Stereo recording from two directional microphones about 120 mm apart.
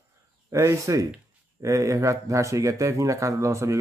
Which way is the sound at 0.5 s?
25° right (ahead or behind).